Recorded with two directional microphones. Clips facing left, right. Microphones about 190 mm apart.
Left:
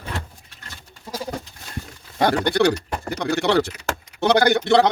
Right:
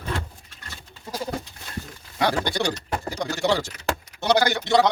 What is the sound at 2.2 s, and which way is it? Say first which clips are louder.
A man's voice: left 6 dB; 60° left (ahead or behind).